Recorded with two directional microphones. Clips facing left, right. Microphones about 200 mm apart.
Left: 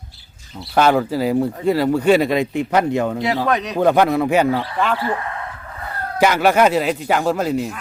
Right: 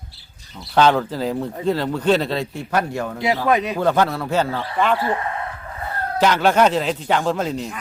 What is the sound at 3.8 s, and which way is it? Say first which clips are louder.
Speech: left 4 dB; 15° left (ahead or behind).